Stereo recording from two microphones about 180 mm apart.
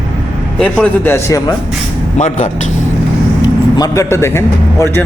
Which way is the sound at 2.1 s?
40° left (ahead or behind).